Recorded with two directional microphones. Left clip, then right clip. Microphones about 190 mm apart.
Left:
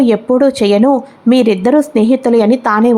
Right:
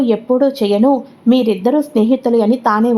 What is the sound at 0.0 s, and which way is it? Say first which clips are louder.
Speech: left 3 dB; 25° left (ahead or behind).